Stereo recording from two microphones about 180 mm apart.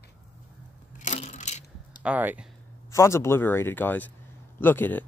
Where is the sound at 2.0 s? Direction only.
10° right (ahead or behind).